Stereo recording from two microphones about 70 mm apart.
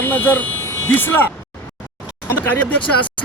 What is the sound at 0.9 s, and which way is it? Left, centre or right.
Speech, left.